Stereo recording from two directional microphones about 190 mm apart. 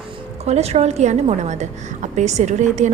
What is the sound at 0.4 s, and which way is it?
A woman's voice, 35° right (ahead or behind).